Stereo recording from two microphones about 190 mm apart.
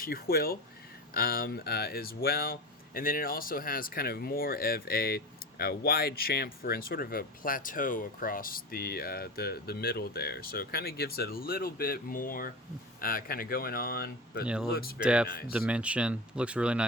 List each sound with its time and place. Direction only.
0.0 s speech: 50° left (ahead or behind)
14.4 s speech: 5° right (ahead or behind)
14.7 s speech: 55° left (ahead or behind)
15.0 s speech: 5° right (ahead or behind)